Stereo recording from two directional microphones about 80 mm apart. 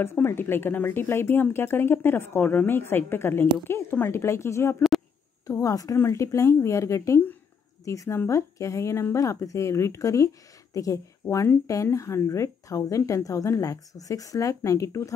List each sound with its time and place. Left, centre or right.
0.0 s speech: left